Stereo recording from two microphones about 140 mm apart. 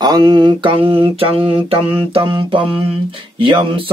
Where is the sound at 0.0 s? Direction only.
30° right (ahead or behind).